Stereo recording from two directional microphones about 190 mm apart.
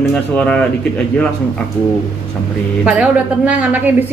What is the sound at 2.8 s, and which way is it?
A woman's voice, 5° right (ahead or behind).